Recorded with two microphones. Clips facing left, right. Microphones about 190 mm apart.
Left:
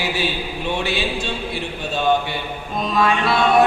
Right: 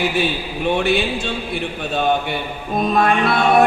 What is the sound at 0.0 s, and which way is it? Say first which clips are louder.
Speech: right 3 dB; 55° right (ahead or behind).